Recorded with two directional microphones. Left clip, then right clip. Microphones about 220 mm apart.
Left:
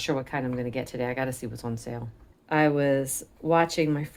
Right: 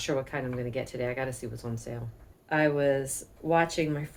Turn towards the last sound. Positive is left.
turn(degrees=35)  # may be behind; listen again after turning